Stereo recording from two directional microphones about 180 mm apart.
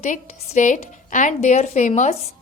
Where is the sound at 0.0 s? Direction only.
40° left (ahead or behind).